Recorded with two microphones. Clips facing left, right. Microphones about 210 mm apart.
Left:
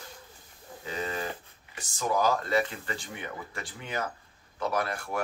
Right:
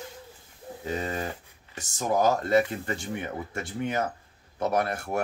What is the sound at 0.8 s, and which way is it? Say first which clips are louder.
Speech: right 3 dB; 45° right (ahead or behind).